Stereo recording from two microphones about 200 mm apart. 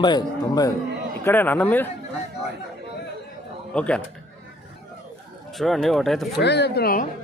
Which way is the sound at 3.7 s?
5° left (ahead or behind).